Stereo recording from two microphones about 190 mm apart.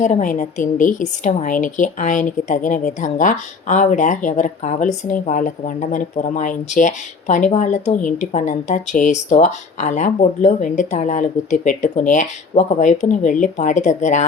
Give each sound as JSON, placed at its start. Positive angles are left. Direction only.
{"t": 0.0, "sound": "speech", "side_deg": 40}